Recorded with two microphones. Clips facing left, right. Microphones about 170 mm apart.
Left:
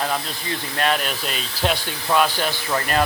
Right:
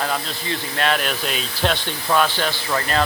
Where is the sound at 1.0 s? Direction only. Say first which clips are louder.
Right 2 dB; centre (ahead or behind).